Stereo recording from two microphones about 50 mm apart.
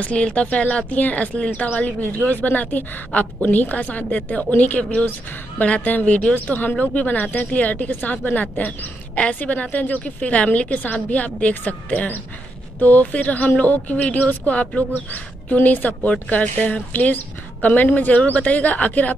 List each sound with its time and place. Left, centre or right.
0.0 s speech: left
3.1 s a woman's voice: left
3.4 s speech: left
9.1 s a woman's voice: left
9.4 s speech: left